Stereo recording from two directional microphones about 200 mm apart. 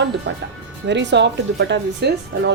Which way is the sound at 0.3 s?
65° right (ahead or behind).